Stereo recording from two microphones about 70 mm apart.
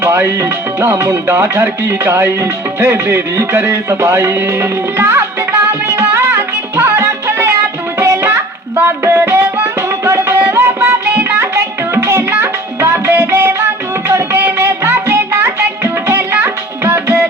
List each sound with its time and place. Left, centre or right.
0.0 s music: right
10.3 s music: right
14.1 s music: right